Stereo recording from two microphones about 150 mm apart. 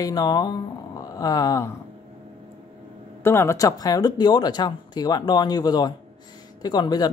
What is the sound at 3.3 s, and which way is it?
Speech, 20° left (ahead or behind).